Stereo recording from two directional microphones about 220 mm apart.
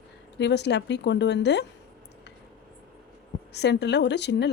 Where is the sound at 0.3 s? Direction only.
50° left (ahead or behind).